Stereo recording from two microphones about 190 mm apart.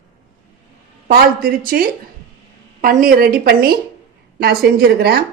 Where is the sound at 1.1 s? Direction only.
50° right (ahead or behind).